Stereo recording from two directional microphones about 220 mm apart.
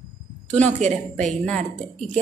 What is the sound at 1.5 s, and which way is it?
Speech, 35° right (ahead or behind).